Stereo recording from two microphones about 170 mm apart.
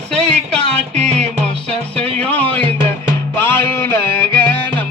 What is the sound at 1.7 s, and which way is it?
Music, 35° right (ahead or behind).